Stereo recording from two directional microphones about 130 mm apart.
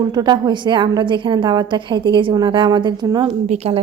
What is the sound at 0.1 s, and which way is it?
A woman's voice, 30° right (ahead or behind).